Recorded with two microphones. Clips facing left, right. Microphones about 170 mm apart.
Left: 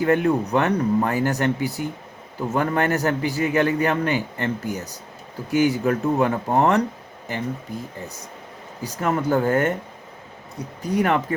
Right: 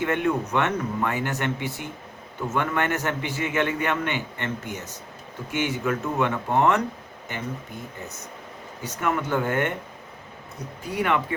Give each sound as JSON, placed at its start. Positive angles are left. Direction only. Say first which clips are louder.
{"t": 0.0, "sound": "a man's voice", "louder": "left 5 dB", "side_deg": 35}
{"t": 8.8, "sound": "a man's voice", "louder": "left 3 dB", "side_deg": 35}
{"t": 10.8, "sound": "a man's voice", "louder": "left 4 dB", "side_deg": 40}